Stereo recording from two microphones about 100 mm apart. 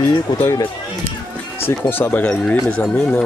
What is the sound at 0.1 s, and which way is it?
Speech, 40° left (ahead or behind).